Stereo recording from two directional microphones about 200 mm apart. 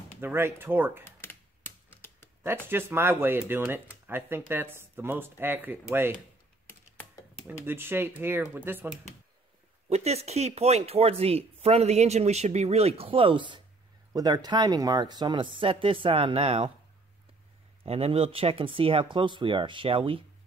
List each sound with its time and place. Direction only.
0.2 s speech: 10° right (ahead or behind)
1.0 s typewriter: 10° left (ahead or behind)
2.4 s speech: 10° right (ahead or behind)
6.7 s typing: 10° left (ahead or behind)
7.4 s speech: 10° right (ahead or behind)
9.8 s speech: 30° right (ahead or behind)
17.8 s speech: 30° right (ahead or behind)